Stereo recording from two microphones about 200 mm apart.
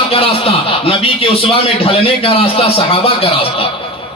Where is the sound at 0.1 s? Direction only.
30° left (ahead or behind).